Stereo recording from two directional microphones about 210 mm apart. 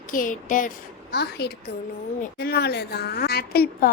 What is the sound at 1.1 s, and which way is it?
A woman's voice, 50° left (ahead or behind).